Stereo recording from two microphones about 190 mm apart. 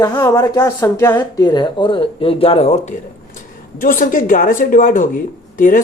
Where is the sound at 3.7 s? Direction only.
45° left (ahead or behind).